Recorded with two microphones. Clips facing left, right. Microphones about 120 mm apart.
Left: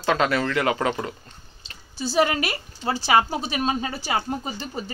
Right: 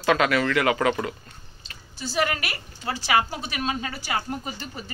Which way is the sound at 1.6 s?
30° left (ahead or behind).